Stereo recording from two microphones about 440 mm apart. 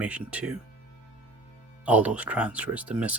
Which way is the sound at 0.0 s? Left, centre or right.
Centre.